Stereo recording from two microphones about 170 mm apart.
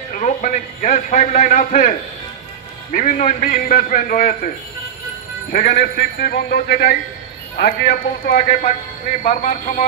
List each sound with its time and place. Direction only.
0.1 s a man's voice: 50° left (ahead or behind)
5.5 s a man's voice: 60° left (ahead or behind)